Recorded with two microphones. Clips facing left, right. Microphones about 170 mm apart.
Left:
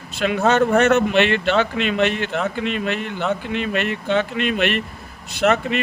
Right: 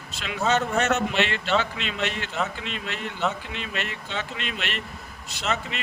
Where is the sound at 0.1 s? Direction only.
55° left (ahead or behind).